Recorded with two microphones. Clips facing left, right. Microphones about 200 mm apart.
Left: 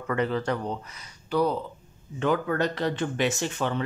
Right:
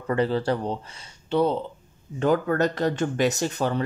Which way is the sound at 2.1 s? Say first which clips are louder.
Right 3 dB; 40° right (ahead or behind).